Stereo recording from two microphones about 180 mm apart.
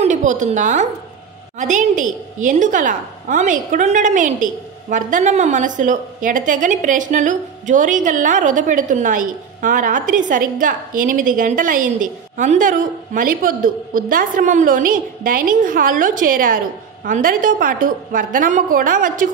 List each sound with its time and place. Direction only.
0.0 s a woman's voice: 45° right (ahead or behind)